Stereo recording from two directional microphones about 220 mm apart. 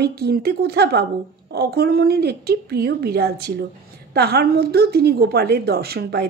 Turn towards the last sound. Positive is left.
turn(degrees=-45)  # may be behind; listen again after turning